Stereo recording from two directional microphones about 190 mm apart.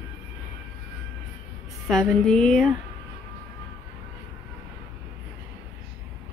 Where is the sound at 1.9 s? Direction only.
Centre (ahead or behind).